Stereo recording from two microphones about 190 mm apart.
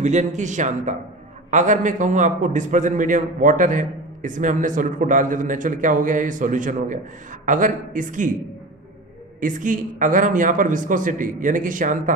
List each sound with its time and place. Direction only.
0.0 s a man's voice: 40° right (ahead or behind)
9.4 s a man's voice: 45° right (ahead or behind)